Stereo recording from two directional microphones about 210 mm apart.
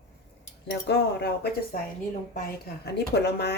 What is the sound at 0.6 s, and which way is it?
Speech, 55° left (ahead or behind).